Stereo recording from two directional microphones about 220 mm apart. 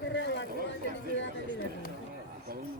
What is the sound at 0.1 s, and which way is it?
Chatter, 55° left (ahead or behind).